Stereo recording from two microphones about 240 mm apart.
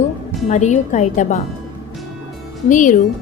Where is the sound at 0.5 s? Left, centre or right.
Left.